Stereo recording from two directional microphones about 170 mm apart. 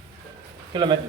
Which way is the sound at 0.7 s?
25° right (ahead or behind).